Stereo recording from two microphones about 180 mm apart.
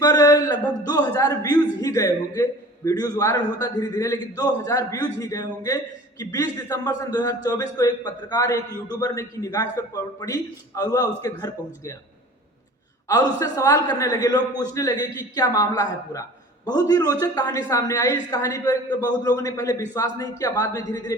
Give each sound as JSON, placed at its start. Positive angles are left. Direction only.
{"t": 0.0, "sound": "a man's voice", "side_deg": 20}
{"t": 13.1, "sound": "a man's voice", "side_deg": 20}